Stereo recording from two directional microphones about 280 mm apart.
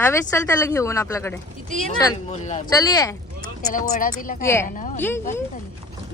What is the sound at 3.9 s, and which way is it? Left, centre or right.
Speech, left.